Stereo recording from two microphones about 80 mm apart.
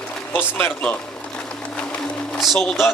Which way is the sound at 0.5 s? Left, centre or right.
Centre.